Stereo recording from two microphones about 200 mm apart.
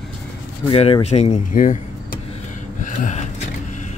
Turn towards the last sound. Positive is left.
turn(degrees=35)  # may be behind; listen again after turning